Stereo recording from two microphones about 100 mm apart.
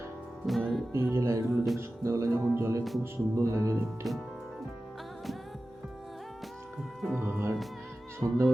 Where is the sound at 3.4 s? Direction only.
30° right (ahead or behind).